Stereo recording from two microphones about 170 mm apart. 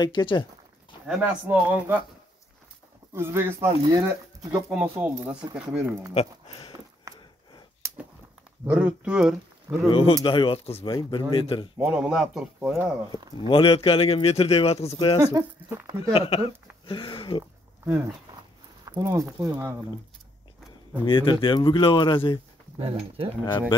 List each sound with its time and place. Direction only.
0.0 s speech: 30° left (ahead or behind)
1.0 s speech: 10° right (ahead or behind)
3.1 s speech: 15° right (ahead or behind)
6.1 s speech: 30° left (ahead or behind)
8.6 s speech: 5° right (ahead or behind)
9.8 s speech: 30° left (ahead or behind)
11.8 s speech: 5° right (ahead or behind)
13.5 s speech: 30° left (ahead or behind)
15.1 s speech: 20° right (ahead or behind)
16.1 s speech: 35° left (ahead or behind)
19.0 s speech: 15° right (ahead or behind)
21.0 s speech: 30° left (ahead or behind)
22.8 s speech: 30° right (ahead or behind)